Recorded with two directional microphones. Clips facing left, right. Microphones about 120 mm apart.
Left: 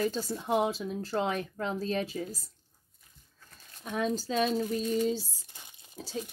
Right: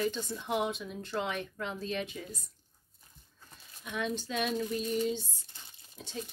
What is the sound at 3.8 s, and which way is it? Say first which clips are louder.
Speech: left 4 dB; 35° left (ahead or behind).